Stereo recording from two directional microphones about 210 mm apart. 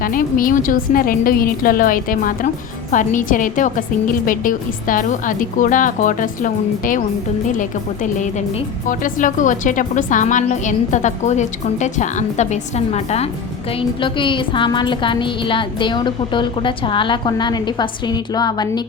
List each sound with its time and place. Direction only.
0.0 s a woman's voice: 40° left (ahead or behind); by 18.8 s 20° left (ahead or behind)